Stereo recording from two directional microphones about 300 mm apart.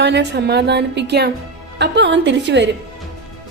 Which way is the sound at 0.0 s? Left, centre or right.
Right.